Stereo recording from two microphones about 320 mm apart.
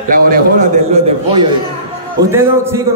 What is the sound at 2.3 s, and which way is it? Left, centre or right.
Speech, centre.